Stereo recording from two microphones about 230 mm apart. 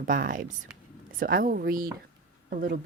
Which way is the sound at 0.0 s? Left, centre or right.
Right.